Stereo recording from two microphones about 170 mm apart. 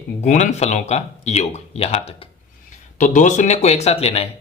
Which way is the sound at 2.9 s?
50° left (ahead or behind).